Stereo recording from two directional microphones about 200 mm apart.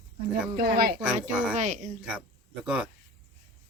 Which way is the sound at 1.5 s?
40° right (ahead or behind).